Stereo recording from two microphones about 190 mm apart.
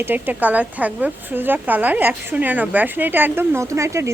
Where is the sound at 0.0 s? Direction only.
10° right (ahead or behind).